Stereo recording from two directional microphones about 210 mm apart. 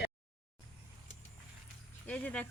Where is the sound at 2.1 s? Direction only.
5° left (ahead or behind).